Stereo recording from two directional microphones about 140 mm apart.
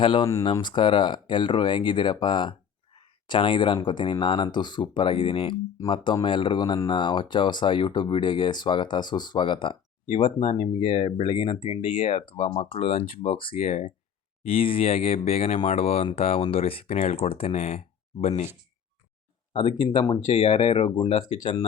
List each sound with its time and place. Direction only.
0.0 s speech: 35° left (ahead or behind)
3.0 s a sound: 35° left (ahead or behind)
3.8 s speech: 35° left (ahead or behind)
20.3 s speech: 40° left (ahead or behind)